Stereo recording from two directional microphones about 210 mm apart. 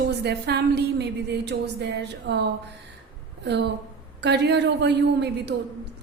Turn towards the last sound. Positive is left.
turn(degrees=-55)  # may be behind; listen again after turning